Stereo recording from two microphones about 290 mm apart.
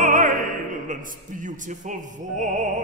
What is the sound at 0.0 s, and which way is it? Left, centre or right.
Opera, right.